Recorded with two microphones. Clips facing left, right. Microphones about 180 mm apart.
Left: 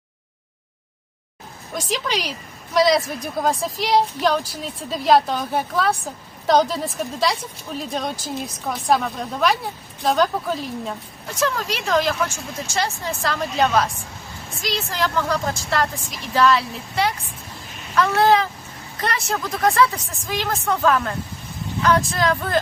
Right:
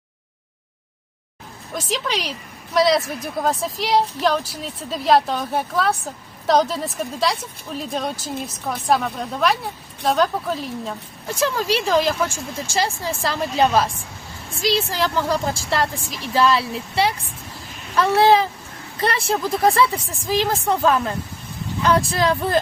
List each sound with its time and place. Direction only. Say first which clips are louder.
1.7 s a woman's voice: even; centre (ahead or behind)
11.3 s a woman's voice: right 3 dB; 30° right (ahead or behind)